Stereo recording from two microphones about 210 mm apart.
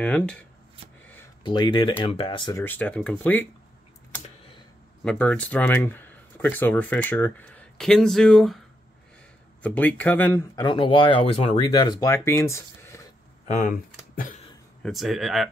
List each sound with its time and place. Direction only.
0.0 s speech: 5° left (ahead or behind)
1.4 s speech: 20° left (ahead or behind)
2.6 s speech: 10° left (ahead or behind)
5.0 s speech: 5° left (ahead or behind)
10.6 s speech: 25° left (ahead or behind)
13.5 s speech: 40° left (ahead or behind)
14.8 s speech: centre (ahead or behind)